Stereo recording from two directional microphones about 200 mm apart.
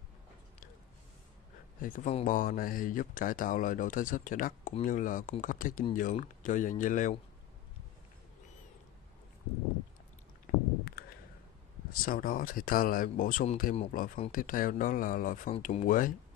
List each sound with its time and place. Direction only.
1.8 s speech: 40° left (ahead or behind)
10.4 s a sound: 50° left (ahead or behind)
11.9 s speech: 45° left (ahead or behind)